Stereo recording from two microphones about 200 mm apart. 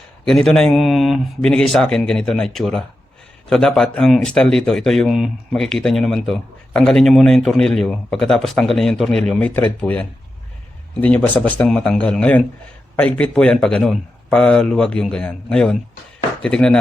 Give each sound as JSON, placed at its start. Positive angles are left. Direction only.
{"t": 0.3, "sound": "speech", "side_deg": 5}